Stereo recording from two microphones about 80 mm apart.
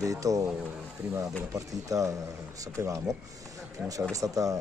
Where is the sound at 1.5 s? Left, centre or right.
Right.